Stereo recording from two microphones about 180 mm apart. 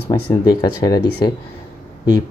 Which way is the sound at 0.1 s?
20° left (ahead or behind).